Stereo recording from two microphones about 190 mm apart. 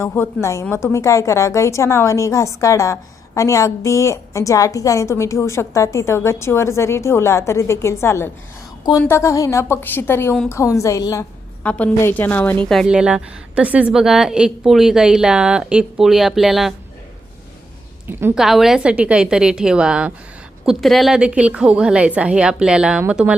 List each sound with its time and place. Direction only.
0.0 s a woman's voice: 10° left (ahead or behind)
18.2 s a woman's voice: 10° right (ahead or behind)
18.4 s a woman's voice: centre (ahead or behind)